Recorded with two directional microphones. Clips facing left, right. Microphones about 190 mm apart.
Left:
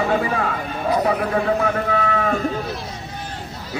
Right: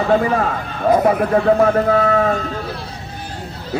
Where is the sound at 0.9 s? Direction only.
50° right (ahead or behind).